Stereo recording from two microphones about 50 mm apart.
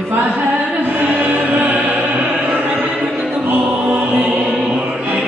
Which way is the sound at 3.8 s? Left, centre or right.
Right.